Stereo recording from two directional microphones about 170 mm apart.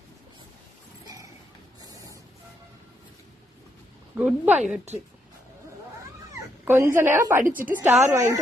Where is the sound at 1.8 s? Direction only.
20° right (ahead or behind).